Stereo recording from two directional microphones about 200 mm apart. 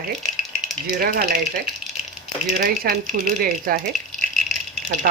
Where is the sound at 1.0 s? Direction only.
50° right (ahead or behind).